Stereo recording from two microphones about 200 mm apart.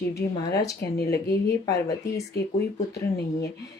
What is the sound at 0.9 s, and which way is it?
Speech, 55° left (ahead or behind).